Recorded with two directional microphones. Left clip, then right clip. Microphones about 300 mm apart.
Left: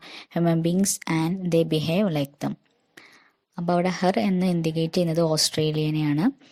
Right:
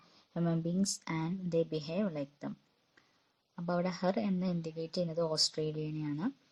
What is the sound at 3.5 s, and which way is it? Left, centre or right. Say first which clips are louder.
Speech: left 11 dB; left.